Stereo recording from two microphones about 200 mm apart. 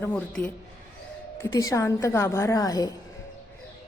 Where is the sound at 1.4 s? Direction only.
15° left (ahead or behind).